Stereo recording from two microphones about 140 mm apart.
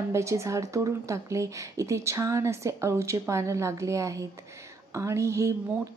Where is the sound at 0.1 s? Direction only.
20° right (ahead or behind).